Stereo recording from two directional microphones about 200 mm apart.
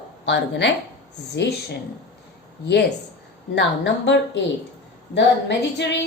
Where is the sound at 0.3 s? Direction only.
60° left (ahead or behind).